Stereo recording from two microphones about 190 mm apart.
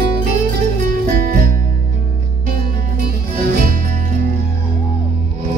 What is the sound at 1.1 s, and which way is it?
Music, 45° right (ahead or behind).